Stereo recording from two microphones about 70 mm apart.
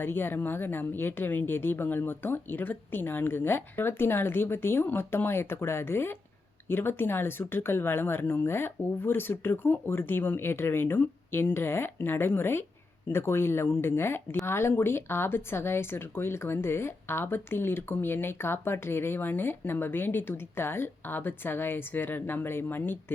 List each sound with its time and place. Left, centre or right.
0.0 s speech: left